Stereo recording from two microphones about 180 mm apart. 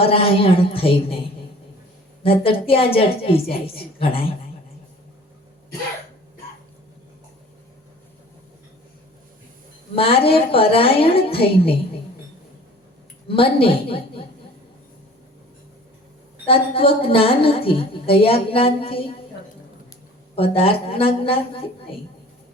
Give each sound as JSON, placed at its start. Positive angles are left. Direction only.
{"t": 0.0, "sound": "a woman's voice", "side_deg": 30}
{"t": 9.9, "sound": "a woman's voice", "side_deg": 30}
{"t": 13.2, "sound": "a woman's voice", "side_deg": 30}
{"t": 16.5, "sound": "a woman's voice", "side_deg": 30}
{"t": 20.3, "sound": "a woman's voice", "side_deg": 30}